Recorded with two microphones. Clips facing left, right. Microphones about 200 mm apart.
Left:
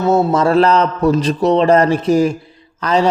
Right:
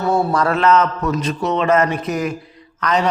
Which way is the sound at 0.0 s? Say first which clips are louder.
Left 4 dB; 20° left (ahead or behind).